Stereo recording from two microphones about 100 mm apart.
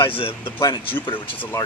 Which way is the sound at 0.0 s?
70° left (ahead or behind).